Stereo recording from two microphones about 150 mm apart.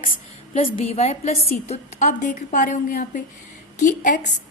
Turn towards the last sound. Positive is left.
turn(degrees=60)  # may be behind; listen again after turning